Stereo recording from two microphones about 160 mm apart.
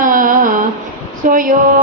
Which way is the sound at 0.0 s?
60° right (ahead or behind).